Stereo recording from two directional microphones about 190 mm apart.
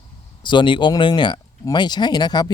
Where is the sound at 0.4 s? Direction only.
25° left (ahead or behind).